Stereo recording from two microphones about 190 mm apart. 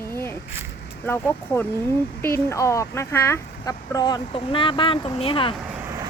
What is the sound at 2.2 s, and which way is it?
Speech, 15° left (ahead or behind).